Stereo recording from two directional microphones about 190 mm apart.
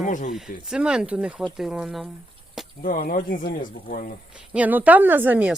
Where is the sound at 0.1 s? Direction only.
40° left (ahead or behind).